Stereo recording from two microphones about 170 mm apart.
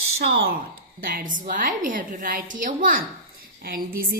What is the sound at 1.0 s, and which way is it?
A woman's voice, 55° right (ahead or behind).